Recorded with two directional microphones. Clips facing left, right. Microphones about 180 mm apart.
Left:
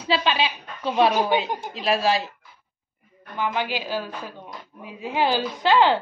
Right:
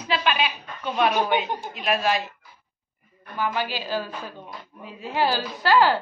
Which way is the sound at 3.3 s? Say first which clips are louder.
Left 1 dB; 15° left (ahead or behind).